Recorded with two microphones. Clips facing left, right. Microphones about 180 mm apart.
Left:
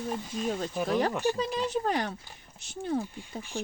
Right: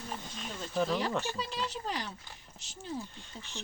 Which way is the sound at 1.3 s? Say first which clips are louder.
Left 8 dB; 50° left (ahead or behind).